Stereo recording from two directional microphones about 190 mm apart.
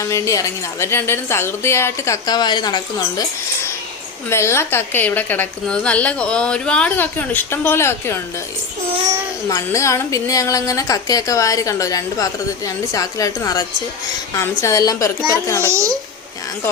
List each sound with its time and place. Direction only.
0.0 s a woman's voice: 15° left (ahead or behind)
4.3 s a woman's voice: 15° left (ahead or behind)
9.5 s a woman's voice: 15° left (ahead or behind)
15.6 s a child's voice: 15° right (ahead or behind)